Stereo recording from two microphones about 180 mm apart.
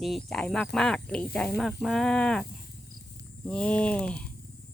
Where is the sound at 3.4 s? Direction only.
5° left (ahead or behind).